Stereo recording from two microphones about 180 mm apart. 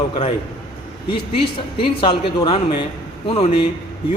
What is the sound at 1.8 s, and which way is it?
A man's voice, 25° left (ahead or behind).